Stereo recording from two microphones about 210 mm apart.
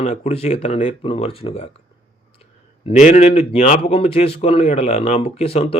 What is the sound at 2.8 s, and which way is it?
Speech, 35° left (ahead or behind).